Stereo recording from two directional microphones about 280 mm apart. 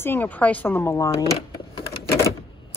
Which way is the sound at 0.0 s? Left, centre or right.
Centre.